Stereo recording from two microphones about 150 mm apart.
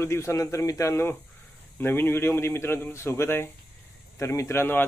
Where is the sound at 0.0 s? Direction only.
20° left (ahead or behind).